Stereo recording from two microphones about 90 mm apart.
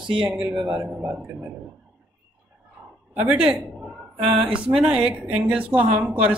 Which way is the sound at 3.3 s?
10° right (ahead or behind).